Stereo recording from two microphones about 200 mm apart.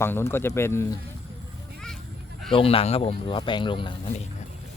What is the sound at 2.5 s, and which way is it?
Speech, 25° left (ahead or behind).